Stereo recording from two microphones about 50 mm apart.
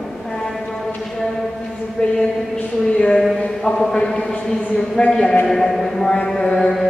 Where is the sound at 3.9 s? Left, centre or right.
Centre.